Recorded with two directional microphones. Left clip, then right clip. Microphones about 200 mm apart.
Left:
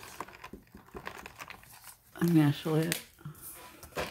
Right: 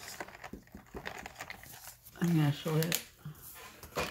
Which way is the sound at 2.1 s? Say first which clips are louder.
Left 6 dB; 55° left (ahead or behind).